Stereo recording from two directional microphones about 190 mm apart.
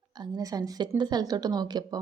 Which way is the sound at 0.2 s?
20° right (ahead or behind).